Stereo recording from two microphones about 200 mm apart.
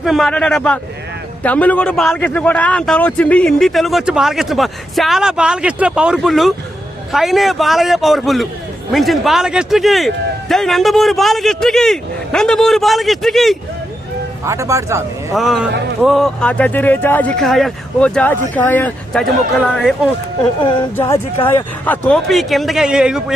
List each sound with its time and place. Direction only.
0.0 s a man's voice: centre (ahead or behind)
14.4 s speech: 15° right (ahead or behind)
15.4 s a man's voice: centre (ahead or behind)
20.6 s a woman's voice: 25° left (ahead or behind)
20.9 s a man's voice: 15° left (ahead or behind); by 23.2 s 5° right (ahead or behind)